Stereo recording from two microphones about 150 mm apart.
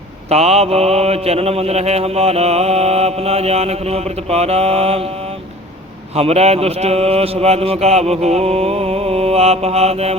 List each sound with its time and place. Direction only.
0.3 s mantra: 45° right (ahead or behind)
6.1 s mantra: 45° right (ahead or behind)